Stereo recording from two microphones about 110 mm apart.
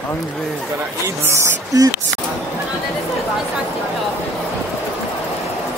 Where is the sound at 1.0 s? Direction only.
25° right (ahead or behind).